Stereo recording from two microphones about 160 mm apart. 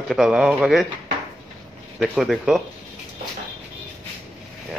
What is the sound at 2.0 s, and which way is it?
Speech, centre (ahead or behind).